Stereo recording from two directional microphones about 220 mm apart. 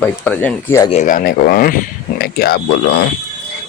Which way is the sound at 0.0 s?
5° left (ahead or behind).